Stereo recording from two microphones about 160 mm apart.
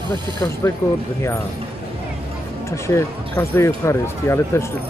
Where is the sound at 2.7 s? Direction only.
15° left (ahead or behind).